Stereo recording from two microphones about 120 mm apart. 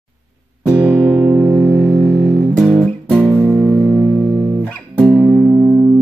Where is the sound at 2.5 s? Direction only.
Centre (ahead or behind).